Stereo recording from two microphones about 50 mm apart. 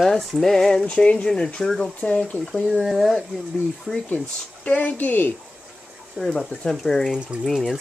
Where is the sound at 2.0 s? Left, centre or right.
Left.